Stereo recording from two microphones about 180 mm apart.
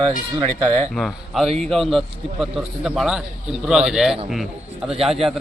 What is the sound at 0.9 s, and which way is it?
A man's voice, centre (ahead or behind).